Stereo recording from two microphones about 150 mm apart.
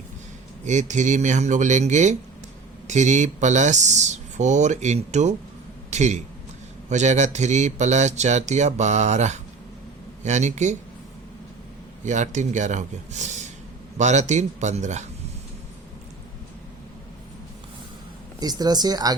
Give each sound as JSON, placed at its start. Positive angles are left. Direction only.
{"t": 0.6, "sound": "speech", "side_deg": -55}
{"t": 12.0, "sound": "speech", "side_deg": -55}
{"t": 18.3, "sound": "speech", "side_deg": -25}